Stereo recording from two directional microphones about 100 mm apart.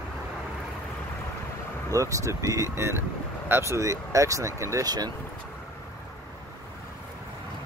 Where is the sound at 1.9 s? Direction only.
30° right (ahead or behind).